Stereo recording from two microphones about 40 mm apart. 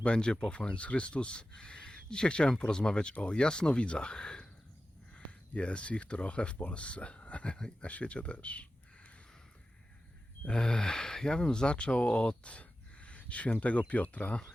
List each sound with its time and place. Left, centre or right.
0.0 s speech: left
7.5 s speech: left
7.9 s speech: left
10.4 s speech: left